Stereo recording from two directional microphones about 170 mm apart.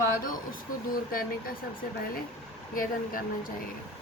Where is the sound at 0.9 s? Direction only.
55° left (ahead or behind).